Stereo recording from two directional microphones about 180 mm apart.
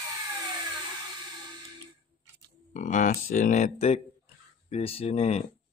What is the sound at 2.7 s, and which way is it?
Speech, 45° left (ahead or behind).